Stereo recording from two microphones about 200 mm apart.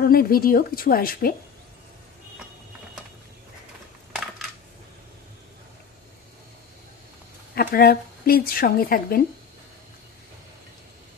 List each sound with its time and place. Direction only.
0.0 s speech: 45° left (ahead or behind)
7.5 s speech: 50° left (ahead or behind)